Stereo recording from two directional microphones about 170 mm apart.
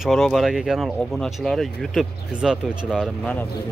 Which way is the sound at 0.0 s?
Centre (ahead or behind).